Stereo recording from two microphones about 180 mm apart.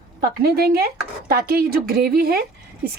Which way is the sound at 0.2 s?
60° right (ahead or behind).